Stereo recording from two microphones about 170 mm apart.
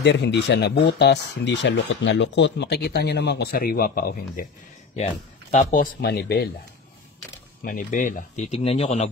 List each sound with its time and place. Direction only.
0.0 s speech: 90° left; by 4.5 s 60° left (ahead or behind)
5.5 s speech: 50° left (ahead or behind)
5.9 s speech: 70° left (ahead or behind)
7.6 s speech: 50° left (ahead or behind)
8.5 s speech: 35° left (ahead or behind)